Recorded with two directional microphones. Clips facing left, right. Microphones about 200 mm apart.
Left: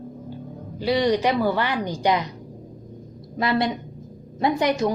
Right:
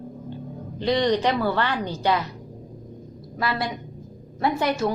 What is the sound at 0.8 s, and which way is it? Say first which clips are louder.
Speech: left 1 dB; 10° left (ahead or behind).